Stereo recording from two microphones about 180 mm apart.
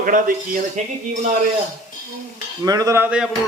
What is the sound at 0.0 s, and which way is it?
Speech, 50° right (ahead or behind).